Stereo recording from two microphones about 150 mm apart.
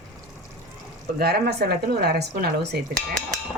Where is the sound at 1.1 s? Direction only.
90° right.